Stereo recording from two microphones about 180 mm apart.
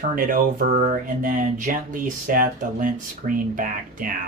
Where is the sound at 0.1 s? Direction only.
45° right (ahead or behind).